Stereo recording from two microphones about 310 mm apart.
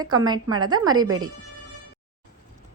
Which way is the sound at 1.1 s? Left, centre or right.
Right.